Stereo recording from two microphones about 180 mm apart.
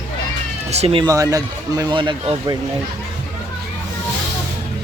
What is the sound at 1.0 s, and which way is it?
Speech, 20° right (ahead or behind).